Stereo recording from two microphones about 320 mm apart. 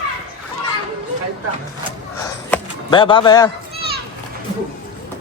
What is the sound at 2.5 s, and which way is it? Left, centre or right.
Speech, centre.